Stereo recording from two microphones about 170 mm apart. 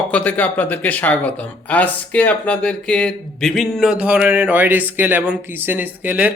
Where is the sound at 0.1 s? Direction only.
10° left (ahead or behind).